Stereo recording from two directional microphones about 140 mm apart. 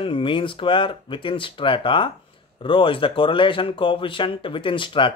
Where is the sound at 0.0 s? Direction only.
35° left (ahead or behind).